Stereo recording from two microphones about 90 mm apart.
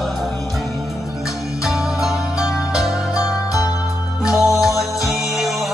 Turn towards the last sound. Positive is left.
turn(degrees=-5)  # may be behind; listen again after turning